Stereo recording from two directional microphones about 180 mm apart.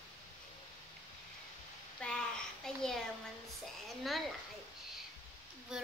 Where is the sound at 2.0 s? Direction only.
5° left (ahead or behind).